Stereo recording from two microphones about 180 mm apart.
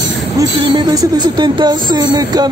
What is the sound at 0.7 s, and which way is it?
Music, 20° right (ahead or behind).